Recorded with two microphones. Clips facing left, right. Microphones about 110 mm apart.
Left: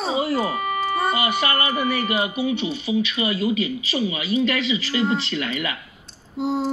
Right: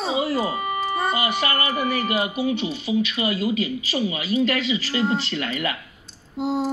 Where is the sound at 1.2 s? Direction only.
25° left (ahead or behind).